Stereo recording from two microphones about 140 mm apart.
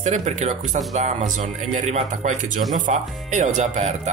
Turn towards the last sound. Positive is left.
turn(degrees=-55)  # may be behind; listen again after turning